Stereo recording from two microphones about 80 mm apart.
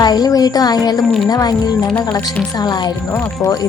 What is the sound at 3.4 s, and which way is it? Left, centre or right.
Speech, left.